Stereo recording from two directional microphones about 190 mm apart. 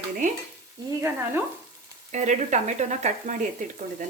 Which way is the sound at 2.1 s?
35° right (ahead or behind).